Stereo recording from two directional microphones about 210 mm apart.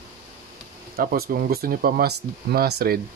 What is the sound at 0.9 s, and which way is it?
Speech, 45° right (ahead or behind).